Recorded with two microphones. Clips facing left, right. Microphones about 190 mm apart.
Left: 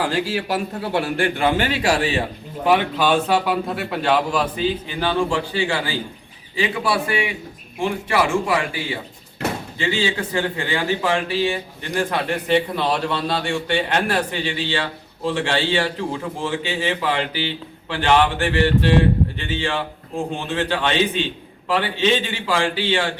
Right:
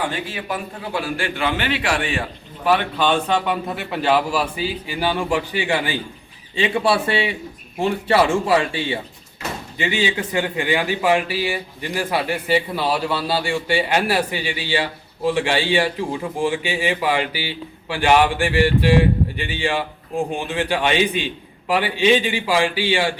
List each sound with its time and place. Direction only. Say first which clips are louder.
0.0 s a man's voice: left 4 dB; 90° left; by 2.2 s 30° left (ahead or behind)
2.6 s a man's voice: left 1 dB; 15° left (ahead or behind)
3.1 s a man's voice: left 1 dB; 5° left (ahead or behind); by 6.0 s 15° right (ahead or behind)
6.6 s a man's voice: right 3 dB; 30° right (ahead or behind)
9.7 s a man's voice: right 3 dB; 15° right (ahead or behind)